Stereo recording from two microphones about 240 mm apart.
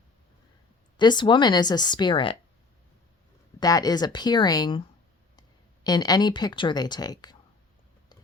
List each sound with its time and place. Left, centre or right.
0.9 s a woman's voice: centre
3.6 s a woman's voice: centre